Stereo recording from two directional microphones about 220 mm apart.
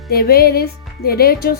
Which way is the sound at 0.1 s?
45° left (ahead or behind).